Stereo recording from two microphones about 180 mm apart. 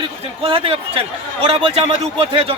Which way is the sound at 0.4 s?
30° right (ahead or behind).